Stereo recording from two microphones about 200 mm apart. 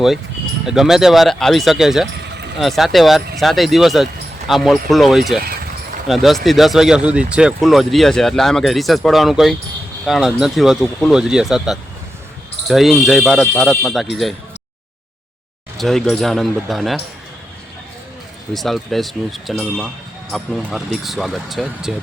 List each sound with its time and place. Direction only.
0.6 s speech: 5° right (ahead or behind)
15.8 s speech: centre (ahead or behind)
18.5 s speech: centre (ahead or behind)